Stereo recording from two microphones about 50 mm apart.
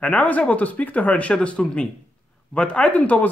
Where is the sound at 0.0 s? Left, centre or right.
Left.